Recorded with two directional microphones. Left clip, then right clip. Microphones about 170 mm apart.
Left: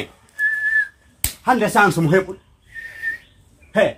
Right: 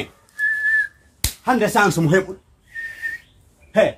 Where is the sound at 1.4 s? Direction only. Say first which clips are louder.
Left 2 dB; 20° right (ahead or behind).